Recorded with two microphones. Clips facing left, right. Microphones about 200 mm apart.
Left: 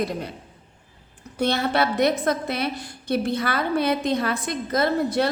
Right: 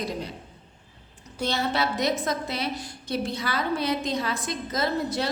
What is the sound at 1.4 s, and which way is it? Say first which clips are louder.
A woman's voice: left 5 dB; 60° left (ahead or behind).